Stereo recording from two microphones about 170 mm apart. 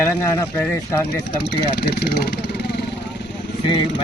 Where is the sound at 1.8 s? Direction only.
70° left (ahead or behind).